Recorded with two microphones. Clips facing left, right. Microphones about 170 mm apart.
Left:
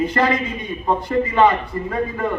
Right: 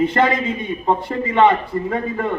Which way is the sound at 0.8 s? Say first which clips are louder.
Left 2 dB; 25° right (ahead or behind).